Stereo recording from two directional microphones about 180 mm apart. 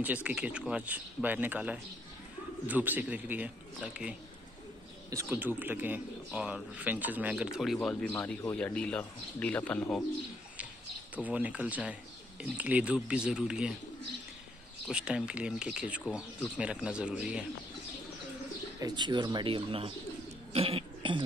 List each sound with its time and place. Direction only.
0.0 s speech: 10° right (ahead or behind)
11.1 s speech: 10° right (ahead or behind)
14.9 s speech: 5° right (ahead or behind)
18.8 s speech: 25° right (ahead or behind)